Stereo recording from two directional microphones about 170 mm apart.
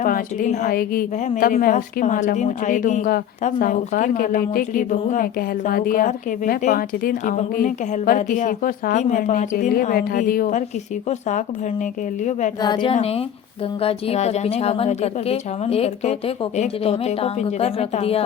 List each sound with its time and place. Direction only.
0.0 s a woman's voice: 55° left (ahead or behind)
12.6 s a woman's voice: 25° left (ahead or behind)